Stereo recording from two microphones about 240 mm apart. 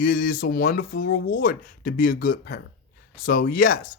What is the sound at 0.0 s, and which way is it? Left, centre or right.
Speech, left.